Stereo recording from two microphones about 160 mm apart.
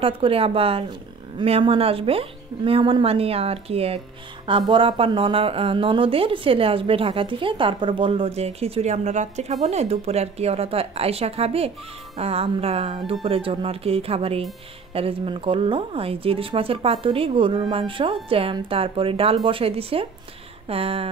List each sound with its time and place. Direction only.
0.0 s a woman's voice: 35° right (ahead or behind)